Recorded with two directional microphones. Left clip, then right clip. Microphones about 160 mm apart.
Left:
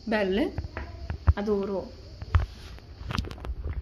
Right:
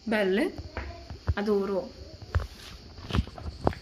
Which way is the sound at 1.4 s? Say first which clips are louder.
Right 1 dB; centre (ahead or behind).